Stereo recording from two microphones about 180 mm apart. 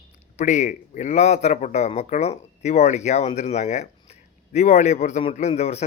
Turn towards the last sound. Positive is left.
turn(degrees=35)  # may be behind; listen again after turning